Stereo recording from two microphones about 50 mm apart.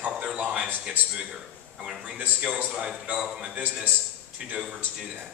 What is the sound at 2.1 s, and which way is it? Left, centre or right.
A man's voice, right.